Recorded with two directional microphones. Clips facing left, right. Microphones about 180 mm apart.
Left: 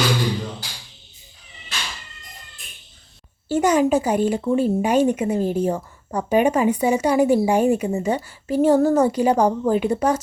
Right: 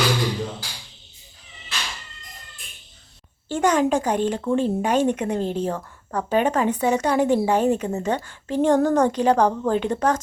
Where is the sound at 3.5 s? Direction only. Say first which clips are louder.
Left 2 dB; 10° left (ahead or behind).